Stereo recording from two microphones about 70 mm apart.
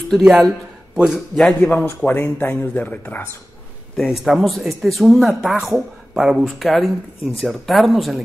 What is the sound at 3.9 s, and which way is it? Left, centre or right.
A man's voice, centre.